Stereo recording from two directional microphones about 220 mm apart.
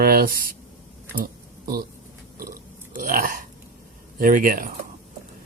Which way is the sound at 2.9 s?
40° right (ahead or behind).